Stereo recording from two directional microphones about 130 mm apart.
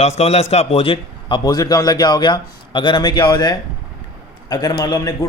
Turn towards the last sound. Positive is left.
turn(degrees=30)  # may be behind; listen again after turning